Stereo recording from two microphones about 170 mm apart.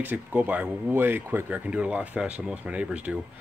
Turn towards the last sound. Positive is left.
turn(degrees=-5)  # may be behind; listen again after turning